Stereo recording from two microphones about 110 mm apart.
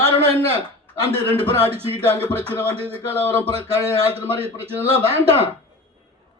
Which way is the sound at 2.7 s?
65° right (ahead or behind).